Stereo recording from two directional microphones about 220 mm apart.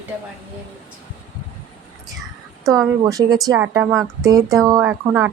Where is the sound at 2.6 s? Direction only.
15° right (ahead or behind).